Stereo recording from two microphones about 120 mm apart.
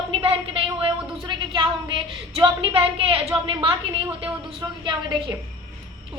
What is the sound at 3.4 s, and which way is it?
Speech, 45° right (ahead or behind).